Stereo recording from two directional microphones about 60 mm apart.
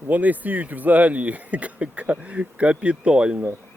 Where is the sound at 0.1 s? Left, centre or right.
Right.